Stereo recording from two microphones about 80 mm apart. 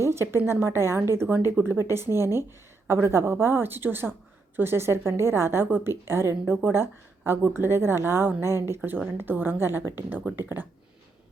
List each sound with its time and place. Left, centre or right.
0.0 s a woman's voice: right